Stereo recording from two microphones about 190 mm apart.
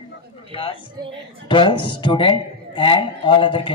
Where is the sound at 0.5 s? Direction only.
30° left (ahead or behind).